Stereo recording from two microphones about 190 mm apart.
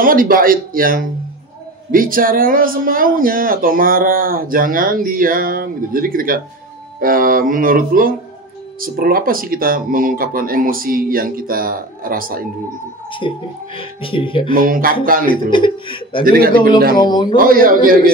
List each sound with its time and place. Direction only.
0.0 s speech: 50° right (ahead or behind)
13.7 s speech: 25° left (ahead or behind)
14.5 s speech: 50° right (ahead or behind)
15.5 s speech: 25° left (ahead or behind)
16.3 s speech: 50° right (ahead or behind)
16.9 s speech: 20° left (ahead or behind)
17.4 s speech: 50° right (ahead or behind)